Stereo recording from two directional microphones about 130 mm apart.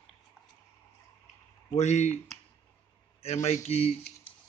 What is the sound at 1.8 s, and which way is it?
Speech, 60° left (ahead or behind).